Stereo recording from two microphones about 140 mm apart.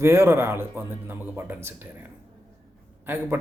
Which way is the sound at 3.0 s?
15° right (ahead or behind).